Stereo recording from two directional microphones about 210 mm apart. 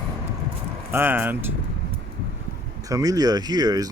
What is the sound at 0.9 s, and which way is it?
Speech, 10° right (ahead or behind).